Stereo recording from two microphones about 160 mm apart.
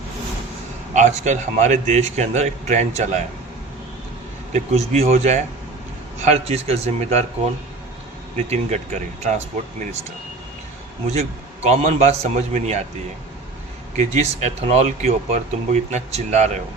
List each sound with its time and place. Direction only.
0.9 s speech: 50° right (ahead or behind)
4.5 s speech: 45° right (ahead or behind)
8.4 s speech: 45° right (ahead or behind)
11.1 s speech: 40° right (ahead or behind)
13.9 s speech: 45° right (ahead or behind)